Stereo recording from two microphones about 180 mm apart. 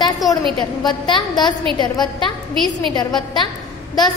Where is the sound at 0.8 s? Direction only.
25° left (ahead or behind).